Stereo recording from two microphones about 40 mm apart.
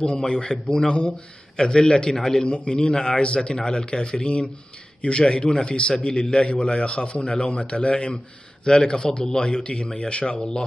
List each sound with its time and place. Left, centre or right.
0.0 s a man's voice: left
2.4 s a man's voice: left